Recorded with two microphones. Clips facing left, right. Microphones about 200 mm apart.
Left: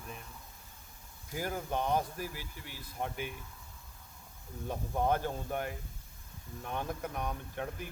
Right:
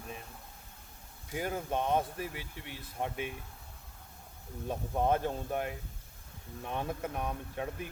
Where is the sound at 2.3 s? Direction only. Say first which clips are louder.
Right 2 dB; 80° right.